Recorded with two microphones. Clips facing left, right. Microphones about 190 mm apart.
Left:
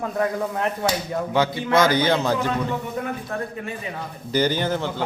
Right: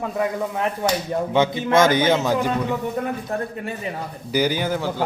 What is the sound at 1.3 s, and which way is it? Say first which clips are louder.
Speech: right 2 dB; 20° right (ahead or behind).